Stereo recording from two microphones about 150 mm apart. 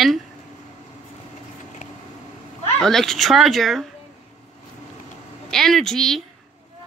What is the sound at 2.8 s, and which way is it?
Speech, 5° left (ahead or behind).